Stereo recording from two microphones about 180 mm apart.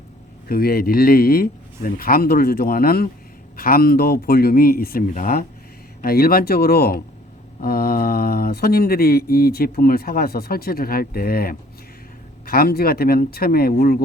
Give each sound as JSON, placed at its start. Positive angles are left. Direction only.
{"t": 0.4, "sound": "speech", "side_deg": 55}